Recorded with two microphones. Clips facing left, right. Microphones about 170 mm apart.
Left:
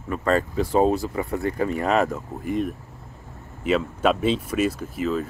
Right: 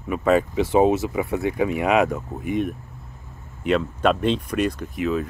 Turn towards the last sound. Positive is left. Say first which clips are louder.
# right 1 dB
turn(degrees=0)  # may be behind; listen again after turning